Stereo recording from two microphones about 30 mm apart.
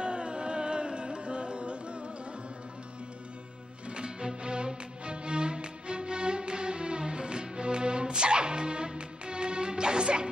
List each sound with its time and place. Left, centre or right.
0.0 s music: right
3.9 s music: right